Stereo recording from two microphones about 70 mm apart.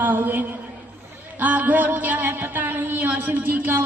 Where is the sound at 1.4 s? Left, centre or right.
Right.